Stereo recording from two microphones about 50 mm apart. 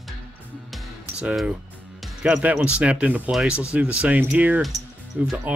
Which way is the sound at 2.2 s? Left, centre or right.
Right.